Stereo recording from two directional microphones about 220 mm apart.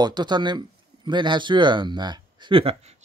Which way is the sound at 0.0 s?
20° right (ahead or behind).